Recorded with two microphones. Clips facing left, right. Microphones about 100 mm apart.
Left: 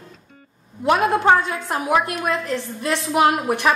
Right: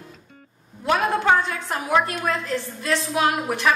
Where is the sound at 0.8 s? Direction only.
20° left (ahead or behind).